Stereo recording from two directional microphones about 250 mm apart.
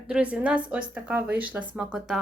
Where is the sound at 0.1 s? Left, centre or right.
Centre.